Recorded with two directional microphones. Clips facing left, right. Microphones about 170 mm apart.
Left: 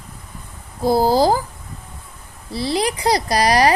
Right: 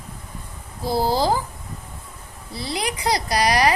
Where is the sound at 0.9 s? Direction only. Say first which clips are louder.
Left 5 dB; 45° left (ahead or behind).